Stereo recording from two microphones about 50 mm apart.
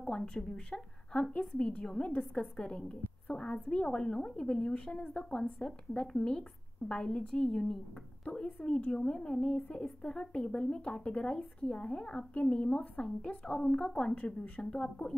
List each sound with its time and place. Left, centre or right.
0.0 s a woman's voice: centre
14.1 s speech: left